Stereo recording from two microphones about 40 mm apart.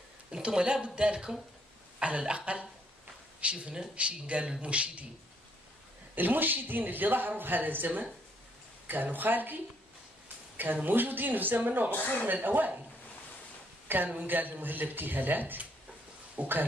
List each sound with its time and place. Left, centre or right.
0.3 s cough: centre
3.9 s speech: right
6.1 s speech: right
10.2 s a sound: right
10.8 s speech: right
13.8 s speech: right
16.4 s speech: right